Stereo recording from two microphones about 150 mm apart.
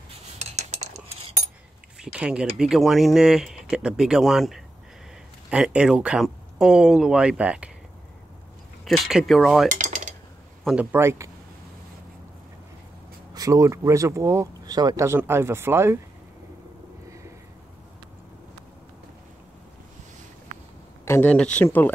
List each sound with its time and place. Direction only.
0.4 s cutlery: 50° right (ahead or behind)
2.1 s speech: 5° right (ahead or behind)
8.8 s speech: centre (ahead or behind)
9.7 s cutlery: 55° right (ahead or behind)
10.6 s a man's voice: 5° right (ahead or behind)
13.3 s speech: 25° right (ahead or behind)
21.0 s speech: 15° left (ahead or behind)